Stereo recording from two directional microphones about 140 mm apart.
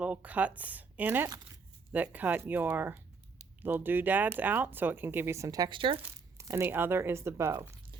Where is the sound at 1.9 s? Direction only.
10° right (ahead or behind); by 5.9 s 35° right (ahead or behind).